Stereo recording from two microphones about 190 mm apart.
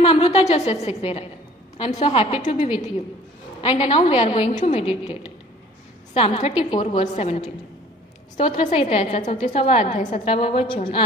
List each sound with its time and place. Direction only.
0.0 s a woman's voice: 30° left (ahead or behind)
3.6 s a woman's voice: 30° left (ahead or behind)
9.2 s a woman's voice: 25° left (ahead or behind)